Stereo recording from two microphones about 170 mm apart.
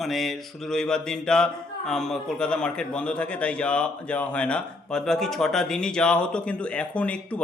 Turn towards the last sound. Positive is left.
turn(degrees=10)  # may be behind; listen again after turning